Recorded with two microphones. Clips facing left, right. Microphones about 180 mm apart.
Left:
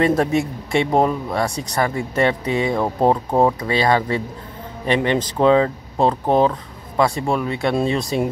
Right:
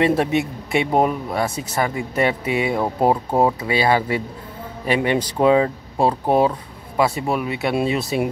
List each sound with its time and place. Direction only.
0.1 s speech: 5° right (ahead or behind)